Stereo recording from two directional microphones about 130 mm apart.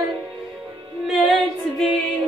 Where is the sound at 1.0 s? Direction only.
Centre (ahead or behind).